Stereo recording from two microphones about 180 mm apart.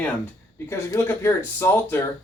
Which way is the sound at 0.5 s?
15° left (ahead or behind).